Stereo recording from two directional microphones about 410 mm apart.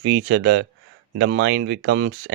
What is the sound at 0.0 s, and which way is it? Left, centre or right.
Speech, right.